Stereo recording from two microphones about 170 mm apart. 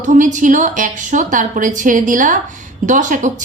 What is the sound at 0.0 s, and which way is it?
A woman's voice, 50° right (ahead or behind).